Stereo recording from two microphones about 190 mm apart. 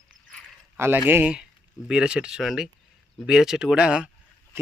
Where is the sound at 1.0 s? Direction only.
10° right (ahead or behind).